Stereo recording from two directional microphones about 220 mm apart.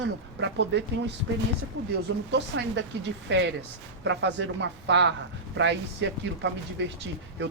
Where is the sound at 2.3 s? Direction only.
50° right (ahead or behind).